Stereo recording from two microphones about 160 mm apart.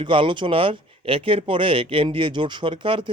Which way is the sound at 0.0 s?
30° right (ahead or behind).